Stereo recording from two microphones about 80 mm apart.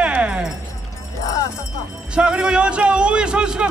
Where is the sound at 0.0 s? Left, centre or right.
Centre.